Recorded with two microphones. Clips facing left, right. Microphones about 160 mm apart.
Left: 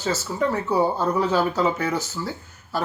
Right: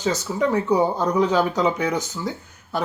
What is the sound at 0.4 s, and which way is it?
Speech, 15° right (ahead or behind).